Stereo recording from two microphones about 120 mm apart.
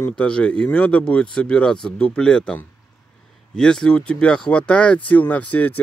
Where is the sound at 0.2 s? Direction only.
10° left (ahead or behind).